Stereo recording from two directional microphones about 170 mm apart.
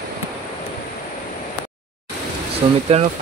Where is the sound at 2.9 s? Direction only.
40° right (ahead or behind).